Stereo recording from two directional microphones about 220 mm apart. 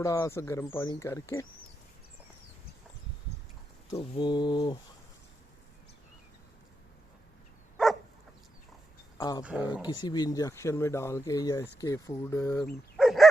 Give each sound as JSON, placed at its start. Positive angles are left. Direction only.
{"t": 0.0, "sound": "speech", "side_deg": 15}
{"t": 3.9, "sound": "mantra", "side_deg": 25}
{"t": 9.1, "sound": "speech", "side_deg": 15}
{"t": 9.4, "sound": "speech", "side_deg": -5}
{"t": 9.8, "sound": "speech", "side_deg": 20}
{"t": 13.0, "sound": "dog", "side_deg": 0}